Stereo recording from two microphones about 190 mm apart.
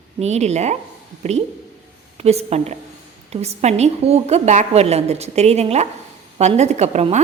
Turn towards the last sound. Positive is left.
turn(degrees=-35)  # may be behind; listen again after turning